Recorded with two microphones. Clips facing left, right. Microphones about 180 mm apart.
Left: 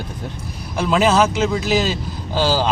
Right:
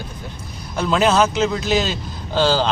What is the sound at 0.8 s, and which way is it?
Speech, centre (ahead or behind).